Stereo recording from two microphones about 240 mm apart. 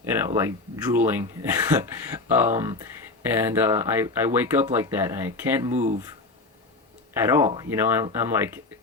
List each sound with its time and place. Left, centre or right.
0.0 s speech: centre
5.7 s speech: right
7.2 s speech: centre